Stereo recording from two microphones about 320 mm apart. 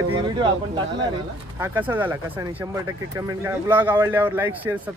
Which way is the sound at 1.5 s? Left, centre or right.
Centre.